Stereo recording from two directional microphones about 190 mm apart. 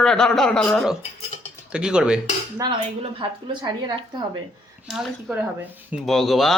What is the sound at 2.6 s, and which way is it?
Speech, 20° right (ahead or behind).